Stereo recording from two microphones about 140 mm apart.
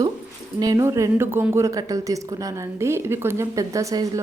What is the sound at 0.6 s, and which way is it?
A woman's voice, 25° right (ahead or behind).